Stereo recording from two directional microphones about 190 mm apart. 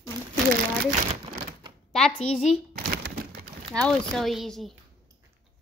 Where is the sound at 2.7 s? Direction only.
50° right (ahead or behind).